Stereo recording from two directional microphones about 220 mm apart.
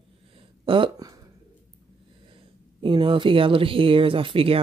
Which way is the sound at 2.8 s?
20° right (ahead or behind).